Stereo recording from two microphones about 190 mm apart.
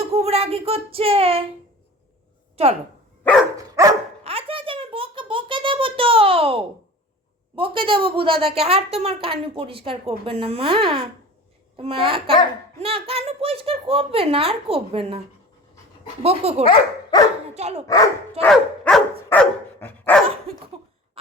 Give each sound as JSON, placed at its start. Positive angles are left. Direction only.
{"t": 0.0, "sound": "a child's voice", "side_deg": -30}
{"t": 2.6, "sound": "a child's voice", "side_deg": -30}
{"t": 3.6, "sound": "dog", "side_deg": -20}
{"t": 4.2, "sound": "a sound", "side_deg": -30}
{"t": 7.5, "sound": "a woman's voice", "side_deg": -25}
{"t": 16.2, "sound": "a child's voice", "side_deg": -30}
{"t": 16.6, "sound": "speech", "side_deg": 20}
{"t": 17.5, "sound": "speech", "side_deg": -35}
{"t": 18.4, "sound": "dog", "side_deg": 5}